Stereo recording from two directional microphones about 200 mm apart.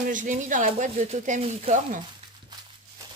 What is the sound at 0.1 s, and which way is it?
Speech, 40° right (ahead or behind).